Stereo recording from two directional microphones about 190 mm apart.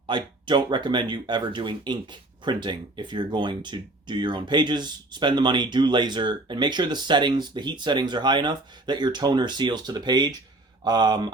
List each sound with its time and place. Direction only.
0.1 s speech: 25° right (ahead or behind)